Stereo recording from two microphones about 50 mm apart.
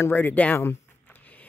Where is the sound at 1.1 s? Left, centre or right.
Left.